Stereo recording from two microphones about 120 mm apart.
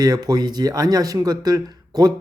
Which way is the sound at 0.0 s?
35° right (ahead or behind).